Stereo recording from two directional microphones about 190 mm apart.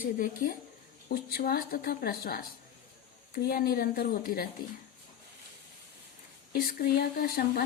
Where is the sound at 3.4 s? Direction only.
50° left (ahead or behind).